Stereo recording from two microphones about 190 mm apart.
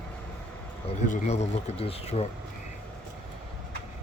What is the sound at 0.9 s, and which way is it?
Speech, 40° left (ahead or behind).